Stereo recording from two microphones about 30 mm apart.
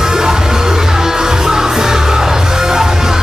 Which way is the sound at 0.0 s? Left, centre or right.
Centre.